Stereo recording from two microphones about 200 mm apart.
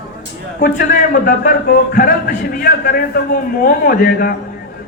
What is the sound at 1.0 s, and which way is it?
A man's voice, 45° left (ahead or behind).